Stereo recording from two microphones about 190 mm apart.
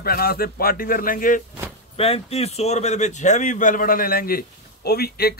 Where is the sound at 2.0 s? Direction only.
30° left (ahead or behind).